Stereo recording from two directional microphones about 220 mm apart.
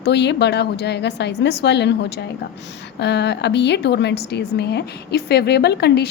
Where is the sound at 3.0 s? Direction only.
50° left (ahead or behind).